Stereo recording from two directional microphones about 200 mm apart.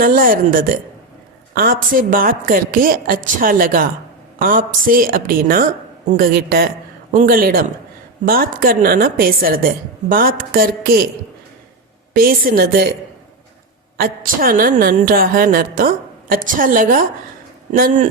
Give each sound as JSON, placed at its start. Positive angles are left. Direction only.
{"t": 0.0, "sound": "a woman's voice", "side_deg": -45}
{"t": 12.1, "sound": "a woman's voice", "side_deg": -45}
{"t": 13.9, "sound": "a woman's voice", "side_deg": -45}